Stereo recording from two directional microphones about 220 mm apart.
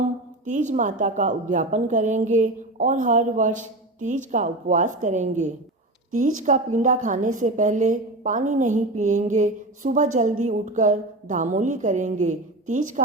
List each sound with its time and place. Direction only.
0.0 s a woman's voice: 35° right (ahead or behind)